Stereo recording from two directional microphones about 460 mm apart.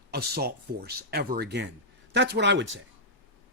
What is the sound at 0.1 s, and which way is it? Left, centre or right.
A man's voice, right.